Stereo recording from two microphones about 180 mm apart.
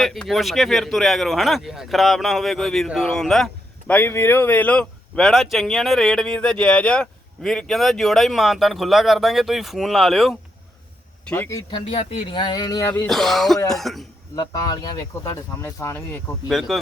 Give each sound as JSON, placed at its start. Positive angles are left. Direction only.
{"t": 0.0, "sound": "speech", "side_deg": 0}
{"t": 11.3, "sound": "speech", "side_deg": 15}
{"t": 11.9, "sound": "speech", "side_deg": 30}
{"t": 13.1, "sound": "speech", "side_deg": 0}
{"t": 14.3, "sound": "speech", "side_deg": 25}
{"t": 16.5, "sound": "speech", "side_deg": 0}